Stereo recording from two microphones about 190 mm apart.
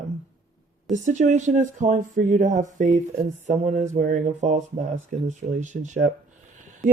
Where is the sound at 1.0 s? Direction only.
40° right (ahead or behind).